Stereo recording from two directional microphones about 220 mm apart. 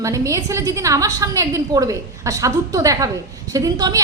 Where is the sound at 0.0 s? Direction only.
15° right (ahead or behind).